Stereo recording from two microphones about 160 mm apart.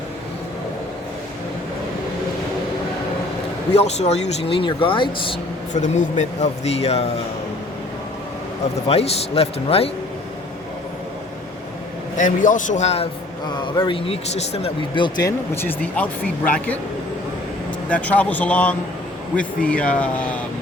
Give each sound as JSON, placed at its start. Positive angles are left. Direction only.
{"t": 3.8, "sound": "speech", "side_deg": 45}
{"t": 5.7, "sound": "speech", "side_deg": 50}
{"t": 8.9, "sound": "speech", "side_deg": 40}
{"t": 12.1, "sound": "speech", "side_deg": 55}
{"t": 13.5, "sound": "speech", "side_deg": 30}
{"t": 15.5, "sound": "speech", "side_deg": 10}
{"t": 17.8, "sound": "speech", "side_deg": 10}